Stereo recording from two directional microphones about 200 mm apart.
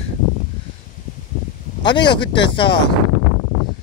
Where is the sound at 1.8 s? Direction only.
25° left (ahead or behind).